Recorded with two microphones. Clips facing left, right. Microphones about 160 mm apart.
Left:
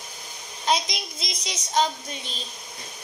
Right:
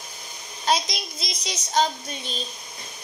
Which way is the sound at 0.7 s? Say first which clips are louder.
Right 1 dB; 20° left (ahead or behind).